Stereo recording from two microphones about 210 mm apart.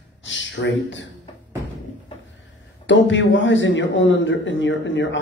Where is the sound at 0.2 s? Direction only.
60° left (ahead or behind).